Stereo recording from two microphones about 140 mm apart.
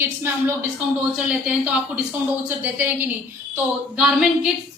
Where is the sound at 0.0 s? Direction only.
15° right (ahead or behind).